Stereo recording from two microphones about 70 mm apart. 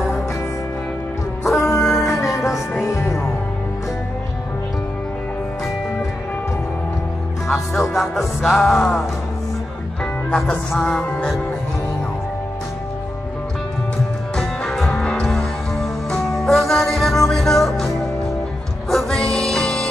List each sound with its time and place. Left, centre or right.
1.4 s music: centre
2.1 s music: left
7.4 s music: centre
10.3 s music: centre
14.3 s music: centre
15.2 s music: centre
18.9 s music: centre